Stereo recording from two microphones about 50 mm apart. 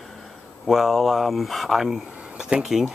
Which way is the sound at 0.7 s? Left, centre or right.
Centre.